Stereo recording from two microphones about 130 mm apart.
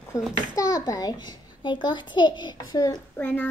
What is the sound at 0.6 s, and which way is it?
A child's voice, 25° left (ahead or behind).